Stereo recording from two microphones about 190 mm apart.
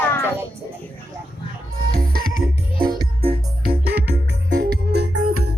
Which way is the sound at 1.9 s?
50° right (ahead or behind).